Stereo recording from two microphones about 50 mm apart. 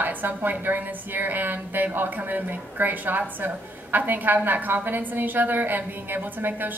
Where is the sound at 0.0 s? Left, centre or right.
Right.